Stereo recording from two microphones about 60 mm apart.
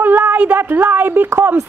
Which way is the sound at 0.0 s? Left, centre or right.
Right.